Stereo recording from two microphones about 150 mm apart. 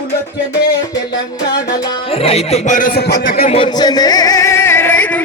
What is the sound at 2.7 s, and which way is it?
Speech, 80° left.